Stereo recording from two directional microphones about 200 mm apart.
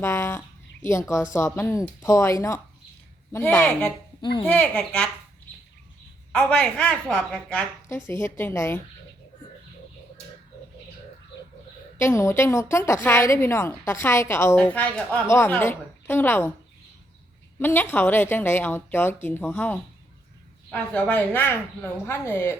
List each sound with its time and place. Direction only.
0.0 s a woman's voice: 15° left (ahead or behind)
6.3 s a woman's voice: 5° left (ahead or behind)
11.9 s a woman's voice: 15° left (ahead or behind)
17.6 s a woman's voice: 10° left (ahead or behind)